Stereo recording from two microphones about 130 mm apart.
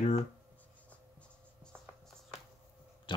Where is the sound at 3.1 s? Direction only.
40° left (ahead or behind).